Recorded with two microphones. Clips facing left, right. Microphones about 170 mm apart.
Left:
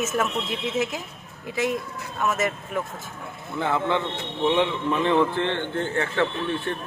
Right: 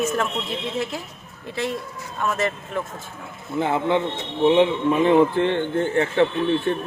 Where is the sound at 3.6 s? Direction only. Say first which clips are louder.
Right 3 dB; 15° right (ahead or behind).